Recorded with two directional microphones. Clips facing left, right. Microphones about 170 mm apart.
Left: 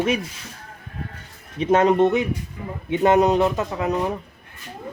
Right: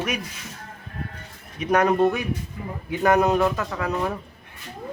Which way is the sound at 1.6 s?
25° left (ahead or behind).